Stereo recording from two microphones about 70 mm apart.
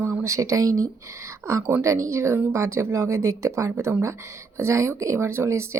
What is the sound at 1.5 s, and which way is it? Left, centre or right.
Speech, right.